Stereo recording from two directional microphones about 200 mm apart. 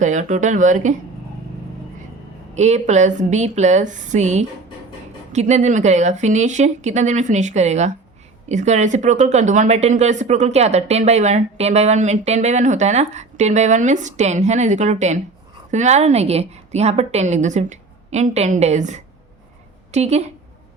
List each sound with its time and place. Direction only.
0.0 s speech: 40° right (ahead or behind)
2.6 s speech: 35° right (ahead or behind)